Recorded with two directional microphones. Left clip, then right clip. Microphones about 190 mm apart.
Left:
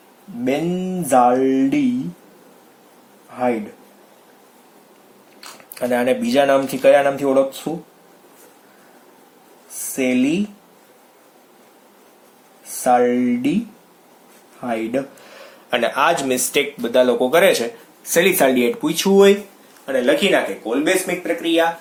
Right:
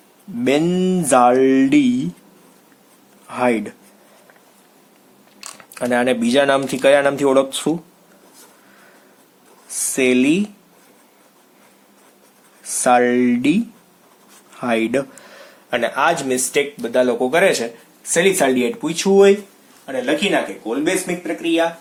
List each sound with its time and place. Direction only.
0.4 s a sound: 45° right (ahead or behind)
5.7 s speech: 30° right (ahead or behind)
9.9 s speech: 35° right (ahead or behind)
12.8 s speech: 35° right (ahead or behind)
14.6 s speech: 35° right (ahead or behind); by 21.7 s 5° right (ahead or behind)